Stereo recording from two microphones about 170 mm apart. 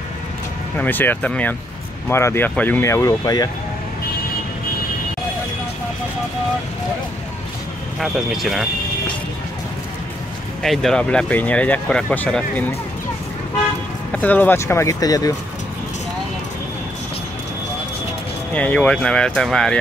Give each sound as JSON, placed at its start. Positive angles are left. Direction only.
{"t": 0.7, "sound": "speech", "side_deg": 10}
{"t": 8.0, "sound": "speech", "side_deg": 0}
{"t": 10.6, "sound": "speech", "side_deg": 0}
{"t": 14.1, "sound": "speech", "side_deg": 10}
{"t": 18.5, "sound": "speech", "side_deg": 10}